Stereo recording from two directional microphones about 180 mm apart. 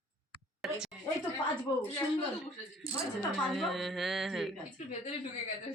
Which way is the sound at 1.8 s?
10° left (ahead or behind).